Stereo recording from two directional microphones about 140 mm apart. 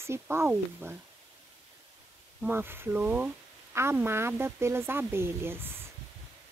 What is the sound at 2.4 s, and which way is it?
Speech, 15° right (ahead or behind).